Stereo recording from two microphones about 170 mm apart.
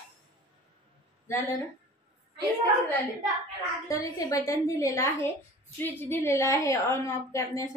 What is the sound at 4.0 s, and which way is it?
A woman's voice, 20° left (ahead or behind).